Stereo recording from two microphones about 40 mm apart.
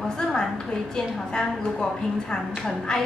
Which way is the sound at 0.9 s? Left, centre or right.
Centre.